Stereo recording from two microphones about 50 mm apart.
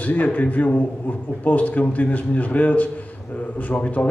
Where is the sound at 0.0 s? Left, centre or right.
Left.